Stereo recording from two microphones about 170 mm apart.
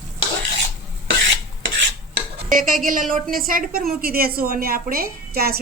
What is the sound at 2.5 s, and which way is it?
A woman's voice, 55° right (ahead or behind).